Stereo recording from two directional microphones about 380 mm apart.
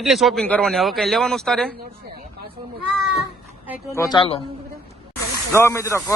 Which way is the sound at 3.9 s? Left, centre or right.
Centre.